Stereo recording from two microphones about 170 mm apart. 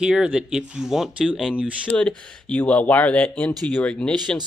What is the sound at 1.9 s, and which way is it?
Speech, 5° left (ahead or behind).